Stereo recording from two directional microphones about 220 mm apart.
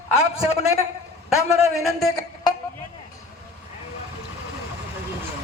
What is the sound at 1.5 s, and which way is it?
Speech, centre (ahead or behind).